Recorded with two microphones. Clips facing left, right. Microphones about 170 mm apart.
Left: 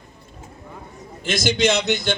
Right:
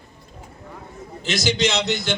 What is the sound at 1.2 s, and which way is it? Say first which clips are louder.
Speech: left 2 dB; 50° left (ahead or behind).